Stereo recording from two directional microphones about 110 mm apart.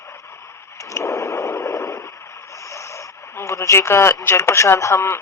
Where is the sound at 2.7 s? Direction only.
25° left (ahead or behind).